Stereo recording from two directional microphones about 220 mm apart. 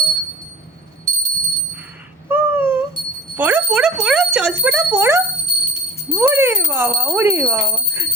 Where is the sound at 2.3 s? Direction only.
10° right (ahead or behind).